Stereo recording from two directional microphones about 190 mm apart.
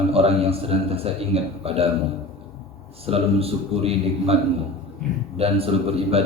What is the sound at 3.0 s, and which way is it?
A man's voice, 30° right (ahead or behind).